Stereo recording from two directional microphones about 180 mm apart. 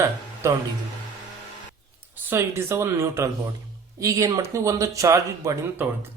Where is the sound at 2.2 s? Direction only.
15° right (ahead or behind).